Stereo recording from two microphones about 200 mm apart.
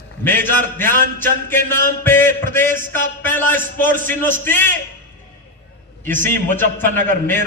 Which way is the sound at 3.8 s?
40° right (ahead or behind).